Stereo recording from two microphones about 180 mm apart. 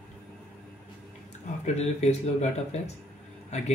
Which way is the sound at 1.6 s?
40° left (ahead or behind).